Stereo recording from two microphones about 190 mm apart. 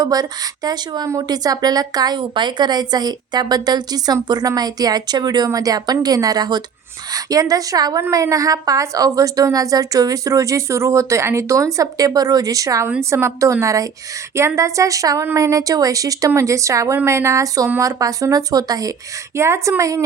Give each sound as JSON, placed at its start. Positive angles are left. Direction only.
{"t": 0.0, "sound": "a woman's voice", "side_deg": -20}